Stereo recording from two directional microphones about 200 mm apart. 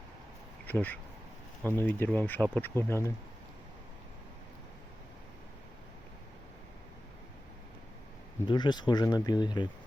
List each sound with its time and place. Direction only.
0.6 s a sound: 10° left (ahead or behind)
1.6 s speech: 10° left (ahead or behind)
8.4 s speech: 20° left (ahead or behind)